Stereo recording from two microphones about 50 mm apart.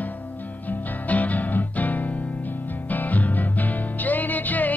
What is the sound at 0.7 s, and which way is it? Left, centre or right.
Music, left.